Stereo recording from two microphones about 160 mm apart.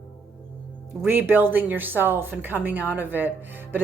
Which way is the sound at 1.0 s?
15° right (ahead or behind).